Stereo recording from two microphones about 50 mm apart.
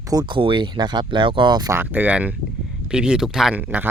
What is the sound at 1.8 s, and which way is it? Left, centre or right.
Speech, right.